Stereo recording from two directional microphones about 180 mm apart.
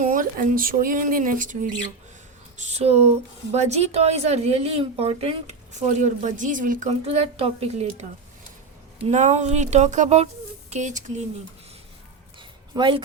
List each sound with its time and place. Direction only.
0.0 s speech: 50° right (ahead or behind)
2.6 s a woman's voice: 35° right (ahead or behind)
9.0 s a woman's voice: 40° right (ahead or behind)
12.4 s a sound: 25° right (ahead or behind)